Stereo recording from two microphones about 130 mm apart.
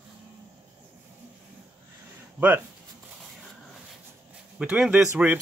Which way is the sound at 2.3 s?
15° right (ahead or behind).